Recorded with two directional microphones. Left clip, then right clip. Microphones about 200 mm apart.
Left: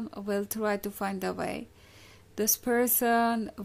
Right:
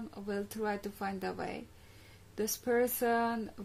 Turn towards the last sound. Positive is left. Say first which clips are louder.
# left 5 dB
turn(degrees=35)  # may be behind; listen again after turning